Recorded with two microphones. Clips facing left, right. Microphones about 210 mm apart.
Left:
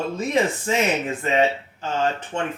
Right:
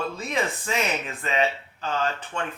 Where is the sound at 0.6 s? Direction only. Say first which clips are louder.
Left 5 dB; 25° left (ahead or behind).